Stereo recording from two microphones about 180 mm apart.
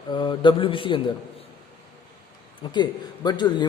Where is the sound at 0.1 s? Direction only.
25° left (ahead or behind).